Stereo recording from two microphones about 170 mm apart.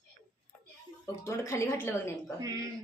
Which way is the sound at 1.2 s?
15° left (ahead or behind).